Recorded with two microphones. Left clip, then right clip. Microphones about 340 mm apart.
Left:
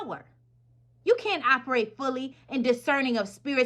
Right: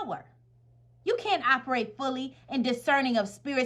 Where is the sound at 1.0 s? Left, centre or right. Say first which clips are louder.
Left 2 dB; right.